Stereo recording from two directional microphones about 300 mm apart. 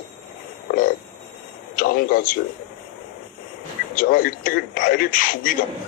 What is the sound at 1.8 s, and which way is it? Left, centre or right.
Speech, left.